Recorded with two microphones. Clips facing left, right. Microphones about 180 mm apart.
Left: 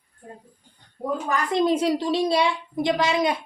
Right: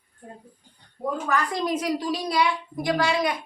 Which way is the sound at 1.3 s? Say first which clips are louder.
Left 5 dB; 25° left (ahead or behind).